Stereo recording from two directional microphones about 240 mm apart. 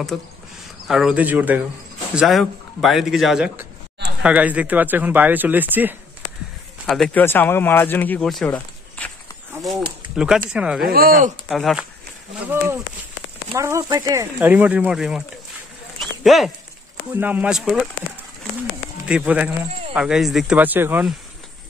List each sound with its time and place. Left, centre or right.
0.1 s speech: centre
6.9 s speech: centre
8.5 s a sound: centre
10.1 s speech: centre
10.8 s speech: right
11.4 s speech: centre
13.6 s speech: centre
16.0 s a sound: centre
17.1 s speech: centre
19.0 s speech: centre